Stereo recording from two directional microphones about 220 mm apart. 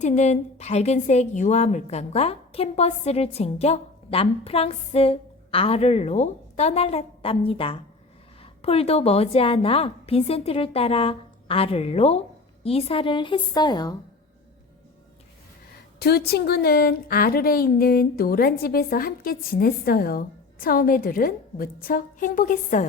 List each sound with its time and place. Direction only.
0.0 s a woman's voice: 30° left (ahead or behind)
16.0 s a woman's voice: 45° left (ahead or behind)